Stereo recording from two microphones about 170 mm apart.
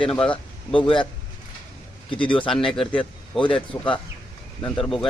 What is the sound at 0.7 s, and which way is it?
Speech, 30° left (ahead or behind).